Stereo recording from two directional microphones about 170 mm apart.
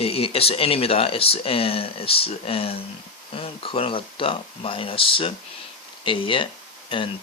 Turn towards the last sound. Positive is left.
turn(degrees=30)  # may be behind; listen again after turning